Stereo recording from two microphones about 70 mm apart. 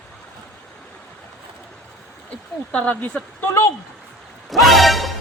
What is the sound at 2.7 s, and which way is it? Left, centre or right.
Speech, centre.